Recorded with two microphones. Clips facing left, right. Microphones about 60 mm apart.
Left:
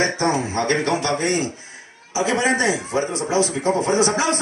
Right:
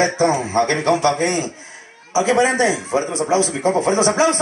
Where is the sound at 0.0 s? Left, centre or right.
Right.